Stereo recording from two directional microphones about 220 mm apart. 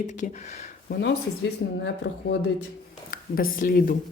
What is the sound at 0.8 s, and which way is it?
Speech, 45° left (ahead or behind).